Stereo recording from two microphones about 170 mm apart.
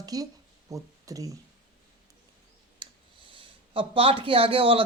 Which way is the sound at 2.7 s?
30° right (ahead or behind).